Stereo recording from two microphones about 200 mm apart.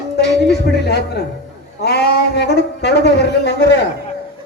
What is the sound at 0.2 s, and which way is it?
A man's voice, 55° left (ahead or behind).